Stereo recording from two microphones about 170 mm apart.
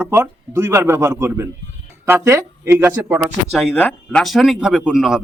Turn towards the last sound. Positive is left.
turn(degrees=-5)  # may be behind; listen again after turning